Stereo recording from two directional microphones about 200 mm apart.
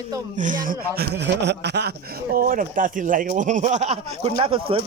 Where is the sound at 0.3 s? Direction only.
40° right (ahead or behind).